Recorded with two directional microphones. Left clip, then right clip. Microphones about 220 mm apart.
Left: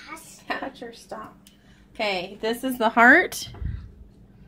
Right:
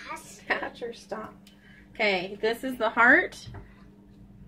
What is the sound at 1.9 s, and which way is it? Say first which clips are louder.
Speech: even; 20° left (ahead or behind).